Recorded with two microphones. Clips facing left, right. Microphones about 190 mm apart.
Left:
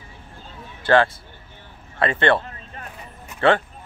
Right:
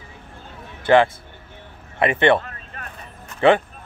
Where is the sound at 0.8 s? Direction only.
20° right (ahead or behind).